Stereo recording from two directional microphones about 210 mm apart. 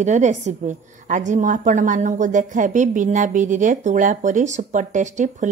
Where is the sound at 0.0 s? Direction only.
35° right (ahead or behind).